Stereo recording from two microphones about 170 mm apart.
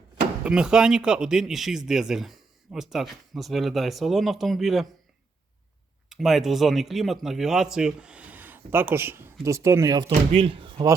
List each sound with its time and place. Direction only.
0.4 s speech: 5° right (ahead or behind)
6.1 s a man's voice: centre (ahead or behind); by 10.1 s 20° right (ahead or behind)
10.1 s speech: 35° right (ahead or behind)